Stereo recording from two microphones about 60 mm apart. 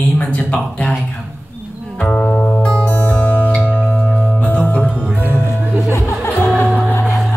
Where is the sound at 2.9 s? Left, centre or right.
Left.